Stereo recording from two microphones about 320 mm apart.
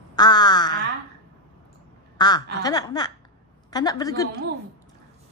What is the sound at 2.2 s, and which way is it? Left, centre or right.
Speech, centre.